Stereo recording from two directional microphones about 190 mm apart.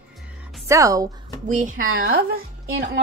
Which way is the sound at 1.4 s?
40° right (ahead or behind).